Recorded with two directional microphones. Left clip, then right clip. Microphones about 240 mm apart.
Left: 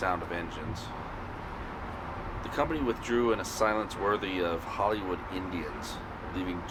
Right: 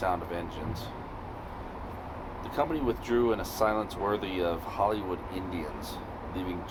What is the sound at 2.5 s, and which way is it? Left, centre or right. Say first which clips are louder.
Speech: right 1 dB; right.